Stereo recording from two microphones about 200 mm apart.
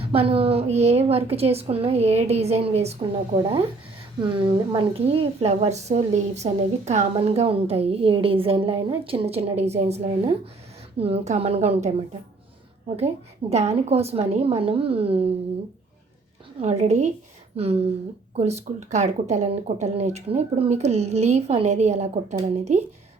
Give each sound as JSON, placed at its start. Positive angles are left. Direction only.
{"t": 0.0, "sound": "speech", "side_deg": -30}
{"t": 4.2, "sound": "a woman's voice", "side_deg": -25}
{"t": 13.5, "sound": "speech", "side_deg": -35}
{"t": 16.6, "sound": "a woman's voice", "side_deg": -30}